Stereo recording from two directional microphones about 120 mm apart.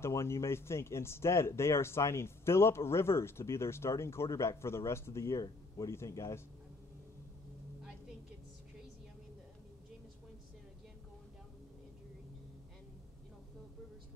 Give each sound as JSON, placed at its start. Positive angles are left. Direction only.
{"t": 0.0, "sound": "speech", "side_deg": 25}